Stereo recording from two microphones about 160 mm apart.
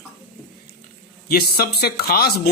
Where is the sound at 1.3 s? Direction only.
75° left (ahead or behind).